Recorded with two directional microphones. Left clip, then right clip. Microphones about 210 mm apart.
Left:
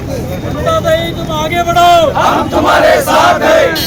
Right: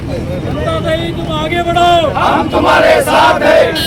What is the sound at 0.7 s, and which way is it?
Speech, 10° left (ahead or behind).